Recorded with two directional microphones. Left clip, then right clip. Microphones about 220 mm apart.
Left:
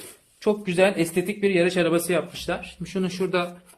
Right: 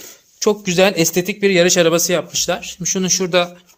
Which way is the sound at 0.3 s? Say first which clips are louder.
Right 6 dB; 50° right (ahead or behind).